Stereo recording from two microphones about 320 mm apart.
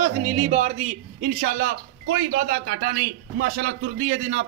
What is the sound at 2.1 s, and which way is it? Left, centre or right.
A man's voice, right.